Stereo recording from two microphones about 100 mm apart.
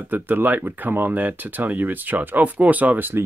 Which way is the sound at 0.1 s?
20° right (ahead or behind).